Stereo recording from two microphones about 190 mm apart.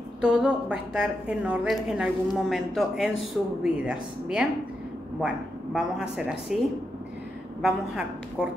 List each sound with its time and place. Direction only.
0.2 s a woman's voice: 5° right (ahead or behind)
7.6 s a woman's voice: 5° right (ahead or behind)